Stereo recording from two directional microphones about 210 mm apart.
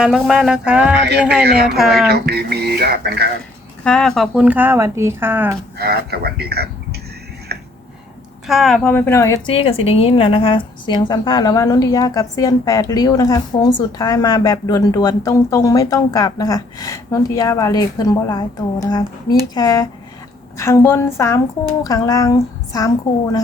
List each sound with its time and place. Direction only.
0.0 s music: 5° right (ahead or behind)
1.5 s speech: 50° right (ahead or behind)
1.8 s music: centre (ahead or behind)
2.0 s speech: 50° right (ahead or behind)
3.8 s speech: 5° left (ahead or behind)
5.7 s speech: 50° right (ahead or behind)
8.4 s speech: centre (ahead or behind)
9.5 s a woman's voice: 25° left (ahead or behind)